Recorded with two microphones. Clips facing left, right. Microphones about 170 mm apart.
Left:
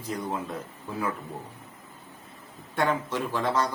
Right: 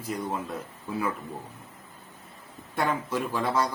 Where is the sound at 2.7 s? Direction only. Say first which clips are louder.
Left 1 dB; 10° right (ahead or behind).